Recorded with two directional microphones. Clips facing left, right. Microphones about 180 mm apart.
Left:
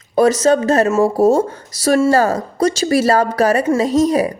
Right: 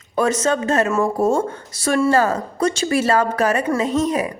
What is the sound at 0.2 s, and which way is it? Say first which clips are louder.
A woman's voice: left 6 dB; 35° left (ahead or behind).